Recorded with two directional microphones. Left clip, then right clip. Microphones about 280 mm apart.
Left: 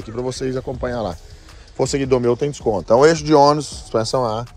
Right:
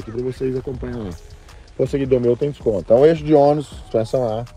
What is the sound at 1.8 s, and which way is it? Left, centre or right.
Speech, centre.